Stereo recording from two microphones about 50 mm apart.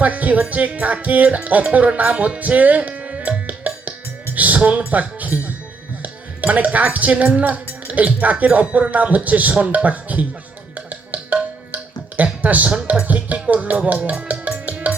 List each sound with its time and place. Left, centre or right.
0.0 s speech: right
4.9 s music: right
6.0 s speech: right
10.8 s music: right
13.5 s speech: right
14.0 s music: right